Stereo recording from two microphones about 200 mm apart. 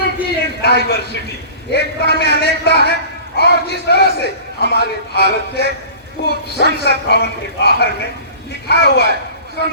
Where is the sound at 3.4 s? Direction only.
55° left (ahead or behind).